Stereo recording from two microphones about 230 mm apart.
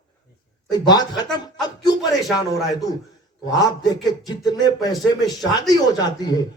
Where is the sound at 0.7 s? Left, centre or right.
Centre.